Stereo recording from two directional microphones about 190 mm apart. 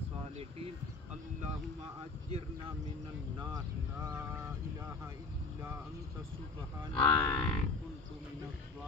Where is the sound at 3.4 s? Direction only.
20° right (ahead or behind).